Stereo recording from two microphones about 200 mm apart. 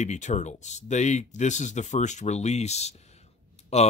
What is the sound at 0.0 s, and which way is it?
Speech, 35° left (ahead or behind).